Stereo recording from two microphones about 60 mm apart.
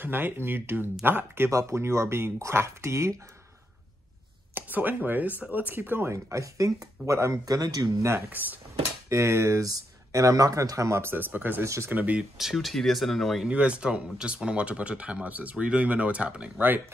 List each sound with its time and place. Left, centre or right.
0.0 s speech: right
1.5 s speech: right
4.6 s speech: right
6.1 s speech: right
8.3 s speech: right
9.1 s speech: right
9.6 s speech: right
11.1 s speech: right
11.6 s speech: right
11.9 s speech: right
12.2 s speech: centre
13.5 s speech: centre